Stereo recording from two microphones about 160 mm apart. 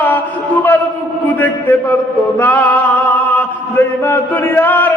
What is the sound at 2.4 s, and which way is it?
Music, 10° left (ahead or behind).